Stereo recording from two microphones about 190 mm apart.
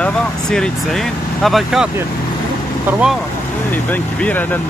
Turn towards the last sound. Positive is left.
turn(degrees=10)  # may be behind; listen again after turning